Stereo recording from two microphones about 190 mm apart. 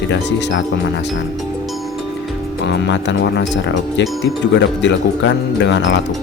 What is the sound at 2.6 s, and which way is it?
Speech, 65° left (ahead or behind).